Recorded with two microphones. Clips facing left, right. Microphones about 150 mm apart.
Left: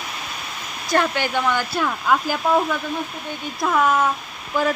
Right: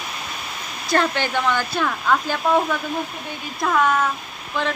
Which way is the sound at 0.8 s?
10° left (ahead or behind).